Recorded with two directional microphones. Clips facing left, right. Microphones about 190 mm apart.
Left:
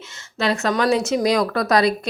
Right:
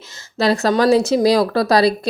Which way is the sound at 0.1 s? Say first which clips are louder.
Right 5 dB; 35° right (ahead or behind).